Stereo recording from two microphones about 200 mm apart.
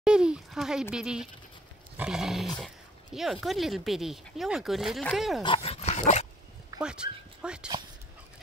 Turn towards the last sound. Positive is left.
turn(degrees=-5)  # may be behind; listen again after turning